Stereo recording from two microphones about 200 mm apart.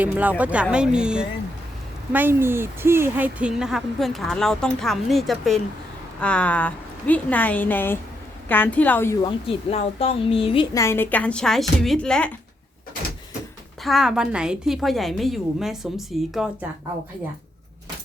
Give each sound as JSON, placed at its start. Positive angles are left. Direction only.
{"t": 0.0, "sound": "a woman's voice", "side_deg": -10}
{"t": 9.2, "sound": "speech", "side_deg": 30}
{"t": 10.8, "sound": "a woman's voice", "side_deg": 10}
{"t": 13.8, "sound": "speech", "side_deg": 0}